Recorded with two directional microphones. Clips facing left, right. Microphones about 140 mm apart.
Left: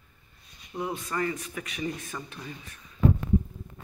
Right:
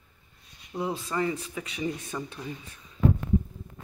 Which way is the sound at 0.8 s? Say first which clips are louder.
Right 2 dB; 25° right (ahead or behind).